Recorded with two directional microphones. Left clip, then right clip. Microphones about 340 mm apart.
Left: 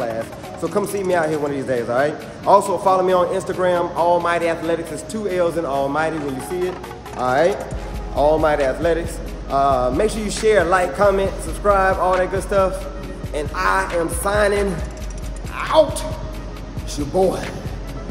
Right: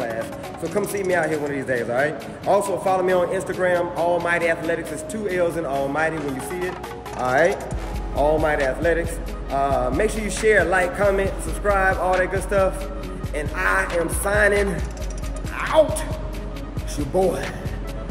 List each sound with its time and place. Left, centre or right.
0.0 s speech: centre
7.2 s speech: centre
15.5 s music: centre